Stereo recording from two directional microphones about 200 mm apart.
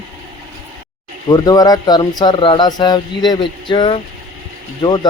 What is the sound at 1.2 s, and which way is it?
Speech, 20° left (ahead or behind).